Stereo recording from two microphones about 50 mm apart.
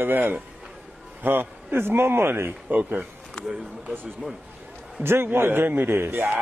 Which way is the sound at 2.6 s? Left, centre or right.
Right.